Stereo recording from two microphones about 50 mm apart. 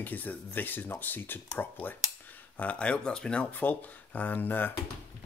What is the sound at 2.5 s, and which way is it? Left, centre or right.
Speech, left.